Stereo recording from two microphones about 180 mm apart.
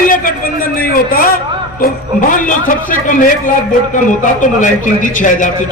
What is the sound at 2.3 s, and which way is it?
Speech, 45° left (ahead or behind).